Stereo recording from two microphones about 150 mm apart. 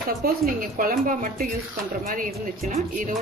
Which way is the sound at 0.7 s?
60° right (ahead or behind).